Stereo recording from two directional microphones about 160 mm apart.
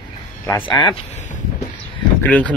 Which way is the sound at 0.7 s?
30° left (ahead or behind).